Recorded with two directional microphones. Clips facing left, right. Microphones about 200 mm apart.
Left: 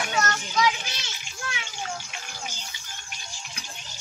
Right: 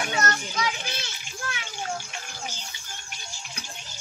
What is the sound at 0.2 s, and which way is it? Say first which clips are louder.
Children playing: left 6 dB; 50° right (ahead or behind).